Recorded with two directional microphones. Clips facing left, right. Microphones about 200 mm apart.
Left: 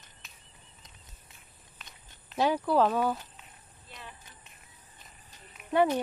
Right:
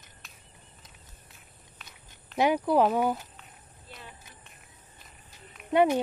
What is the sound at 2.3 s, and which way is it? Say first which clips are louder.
Speech: right 2 dB; 20° right (ahead or behind).